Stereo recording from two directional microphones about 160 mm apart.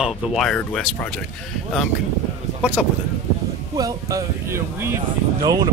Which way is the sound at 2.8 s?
Centre (ahead or behind).